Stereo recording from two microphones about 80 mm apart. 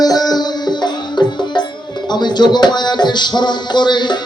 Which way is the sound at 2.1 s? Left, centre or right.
Left.